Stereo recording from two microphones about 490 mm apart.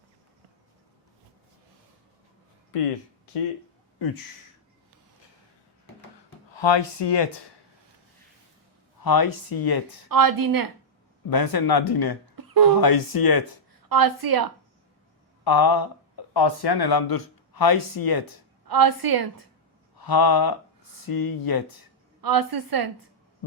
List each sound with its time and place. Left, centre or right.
6.5 s speech: left
9.0 s speech: left
10.1 s a woman's voice: right
11.3 s speech: left
12.4 s a sound: right
12.8 s speech: left
13.8 s a woman's voice: right
15.4 s speech: left
18.7 s a woman's voice: right
20.0 s speech: left
22.2 s a woman's voice: right